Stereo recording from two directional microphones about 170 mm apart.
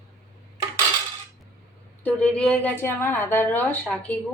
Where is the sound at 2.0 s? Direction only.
10° left (ahead or behind).